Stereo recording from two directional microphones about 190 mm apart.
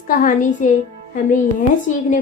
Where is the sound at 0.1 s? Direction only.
45° left (ahead or behind).